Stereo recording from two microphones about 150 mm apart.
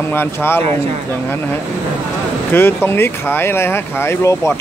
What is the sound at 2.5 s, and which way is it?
A man's voice, 15° left (ahead or behind).